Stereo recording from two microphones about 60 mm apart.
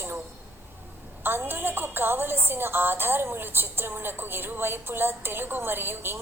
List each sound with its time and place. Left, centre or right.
1.2 s a woman's voice: right